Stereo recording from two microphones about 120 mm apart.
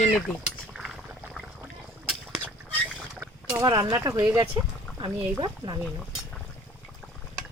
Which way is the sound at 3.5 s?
30° right (ahead or behind).